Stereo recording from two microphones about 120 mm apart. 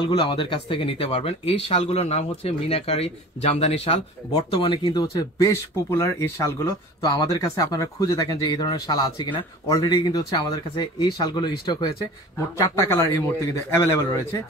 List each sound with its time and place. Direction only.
0.0 s speech: 45° left (ahead or behind)
4.8 s speech: 35° left (ahead or behind)
5.5 s speech: 25° left (ahead or behind)
12.5 s speech: 25° left (ahead or behind)